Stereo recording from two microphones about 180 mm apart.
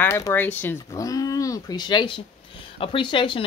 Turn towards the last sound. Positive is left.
turn(degrees=30)  # may be behind; listen again after turning